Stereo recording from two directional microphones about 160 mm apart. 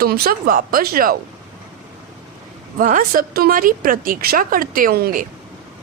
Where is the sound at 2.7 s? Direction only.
60° right (ahead or behind).